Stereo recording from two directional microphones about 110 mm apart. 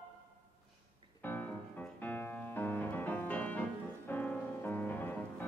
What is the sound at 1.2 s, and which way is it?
Music, 15° left (ahead or behind).